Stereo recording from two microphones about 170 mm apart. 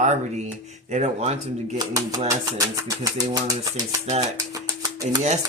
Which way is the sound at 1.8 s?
20° right (ahead or behind).